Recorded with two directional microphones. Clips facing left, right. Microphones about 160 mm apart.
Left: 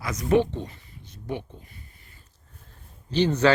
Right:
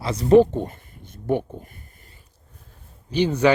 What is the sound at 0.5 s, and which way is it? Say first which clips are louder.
Speech: right 7 dB; 50° right (ahead or behind).